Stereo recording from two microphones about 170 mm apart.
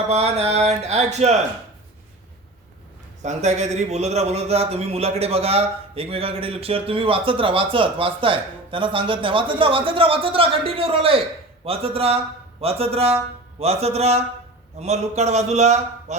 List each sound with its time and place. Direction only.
0.1 s speech: 40° right (ahead or behind)
3.2 s speech: 40° right (ahead or behind)